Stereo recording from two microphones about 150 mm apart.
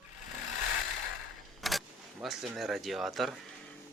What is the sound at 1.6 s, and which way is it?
Vehicle, centre (ahead or behind).